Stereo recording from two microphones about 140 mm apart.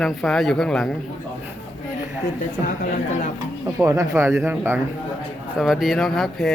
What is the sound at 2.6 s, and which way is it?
Speech, 70° left (ahead or behind).